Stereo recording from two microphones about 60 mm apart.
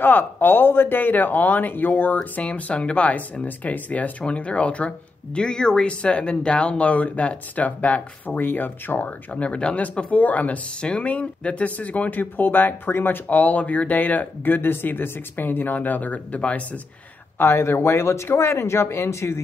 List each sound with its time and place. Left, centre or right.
0.0 s speech: left
17.4 s speech: left